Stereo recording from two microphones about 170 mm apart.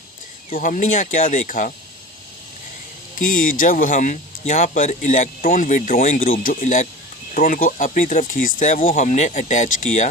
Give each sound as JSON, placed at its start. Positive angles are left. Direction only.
{"t": 0.5, "sound": "speech", "side_deg": 50}
{"t": 3.2, "sound": "speech", "side_deg": 55}